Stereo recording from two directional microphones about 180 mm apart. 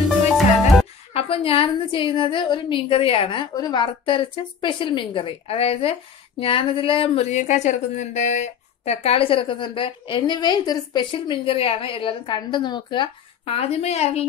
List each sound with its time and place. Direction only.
1.1 s speech: 30° left (ahead or behind)